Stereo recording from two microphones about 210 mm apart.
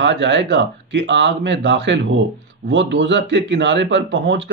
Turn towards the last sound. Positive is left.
turn(degrees=-60)  # may be behind; listen again after turning